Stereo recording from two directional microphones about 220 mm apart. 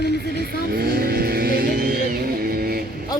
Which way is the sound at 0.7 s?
45° right (ahead or behind).